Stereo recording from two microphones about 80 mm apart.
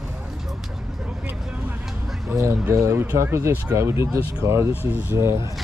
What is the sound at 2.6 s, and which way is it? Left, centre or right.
Speech, right.